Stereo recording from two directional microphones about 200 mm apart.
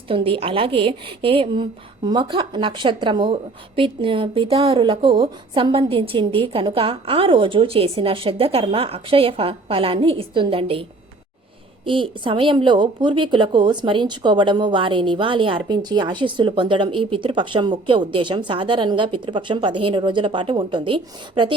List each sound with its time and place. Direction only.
0.1 s a woman's voice: 25° right (ahead or behind)
11.9 s a woman's voice: 25° right (ahead or behind)